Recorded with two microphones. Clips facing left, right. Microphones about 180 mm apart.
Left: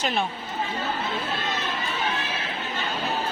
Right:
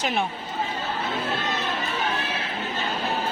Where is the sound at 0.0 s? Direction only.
15° right (ahead or behind).